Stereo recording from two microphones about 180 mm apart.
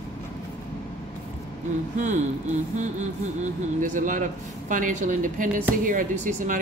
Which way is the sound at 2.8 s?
40° right (ahead or behind).